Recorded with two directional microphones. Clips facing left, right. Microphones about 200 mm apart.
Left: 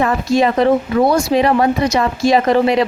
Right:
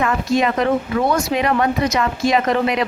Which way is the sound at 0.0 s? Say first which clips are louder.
Left 3 dB; 30° left (ahead or behind).